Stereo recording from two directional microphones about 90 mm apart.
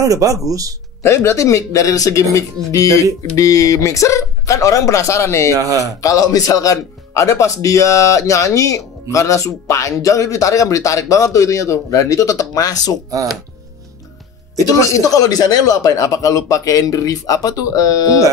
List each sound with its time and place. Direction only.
0.0 s speech: 40° right (ahead or behind)
1.0 s speech: 30° left (ahead or behind)
5.5 s speech: 40° right (ahead or behind)
5.9 s speech: 40° left (ahead or behind)
14.8 s speech: 35° left (ahead or behind)